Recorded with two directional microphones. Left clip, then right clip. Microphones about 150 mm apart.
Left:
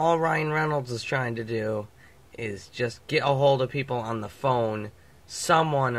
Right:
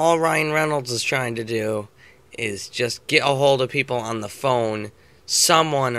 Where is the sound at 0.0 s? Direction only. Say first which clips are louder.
Right 5 dB; 20° right (ahead or behind).